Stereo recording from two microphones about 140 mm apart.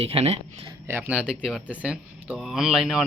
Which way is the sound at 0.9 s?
15° right (ahead or behind).